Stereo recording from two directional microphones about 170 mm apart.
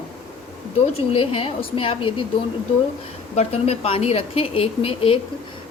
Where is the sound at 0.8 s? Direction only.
35° left (ahead or behind).